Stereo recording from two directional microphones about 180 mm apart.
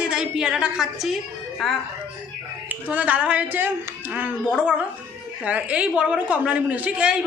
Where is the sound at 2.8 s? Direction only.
10° right (ahead or behind).